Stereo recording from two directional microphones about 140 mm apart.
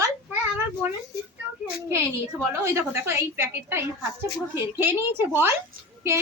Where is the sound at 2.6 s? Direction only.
20° right (ahead or behind).